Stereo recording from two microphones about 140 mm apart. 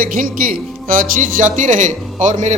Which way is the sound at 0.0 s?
85° right.